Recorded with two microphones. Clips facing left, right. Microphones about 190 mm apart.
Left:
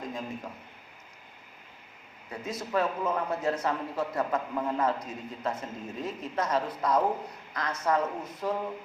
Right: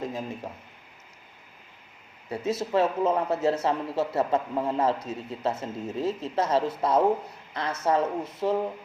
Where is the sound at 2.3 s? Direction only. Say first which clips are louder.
Right 5 dB; 25° right (ahead or behind).